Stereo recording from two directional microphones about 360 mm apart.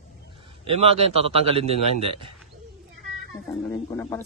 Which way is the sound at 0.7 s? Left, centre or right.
Centre.